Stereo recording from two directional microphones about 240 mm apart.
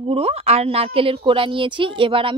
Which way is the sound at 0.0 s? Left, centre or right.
Right.